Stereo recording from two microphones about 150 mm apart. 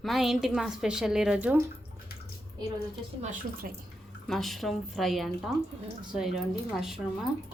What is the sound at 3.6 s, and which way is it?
Speech, 75° right (ahead or behind).